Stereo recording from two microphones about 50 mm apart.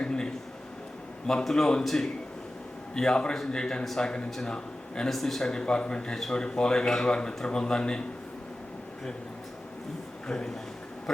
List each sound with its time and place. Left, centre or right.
0.0 s a sound: centre
1.3 s a man's voice: centre
10.2 s a man's voice: centre